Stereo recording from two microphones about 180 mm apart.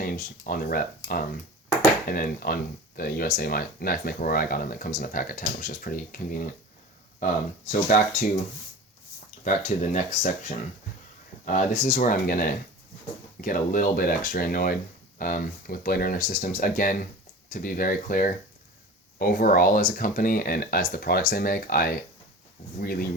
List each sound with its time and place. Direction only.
0.0 s speech: 55° left (ahead or behind)
7.7 s speech: 45° left (ahead or behind)
9.4 s speech: 40° left (ahead or behind)